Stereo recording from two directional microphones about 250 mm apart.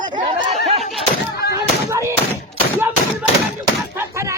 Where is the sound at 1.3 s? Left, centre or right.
Left.